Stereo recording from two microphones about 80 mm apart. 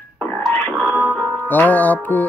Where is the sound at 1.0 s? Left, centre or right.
Centre.